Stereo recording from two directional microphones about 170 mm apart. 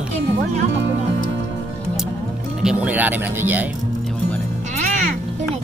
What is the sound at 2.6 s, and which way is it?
Speech, 5° right (ahead or behind).